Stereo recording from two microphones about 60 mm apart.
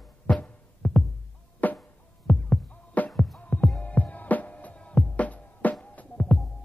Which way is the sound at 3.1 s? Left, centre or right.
Centre.